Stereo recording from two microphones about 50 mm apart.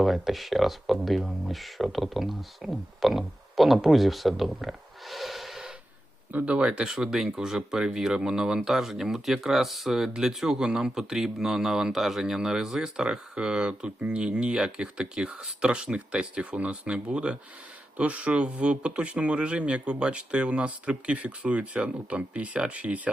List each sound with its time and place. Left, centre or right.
0.0 s speech: centre
6.3 s speech: right
6.9 s speech: centre; by 23.1 s right